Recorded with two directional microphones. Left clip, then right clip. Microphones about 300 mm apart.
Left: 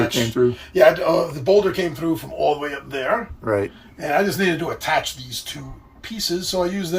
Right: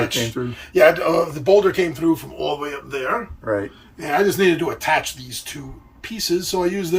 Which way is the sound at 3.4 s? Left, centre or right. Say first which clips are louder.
Left 1 dB; left.